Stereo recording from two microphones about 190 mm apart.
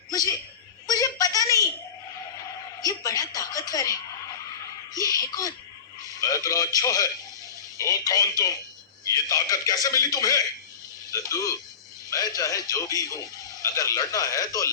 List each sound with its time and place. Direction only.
0.9 s a man's voice: 20° left (ahead or behind)
2.8 s a man's voice: 20° left (ahead or behind)
5.1 s a man's voice: 20° left (ahead or behind)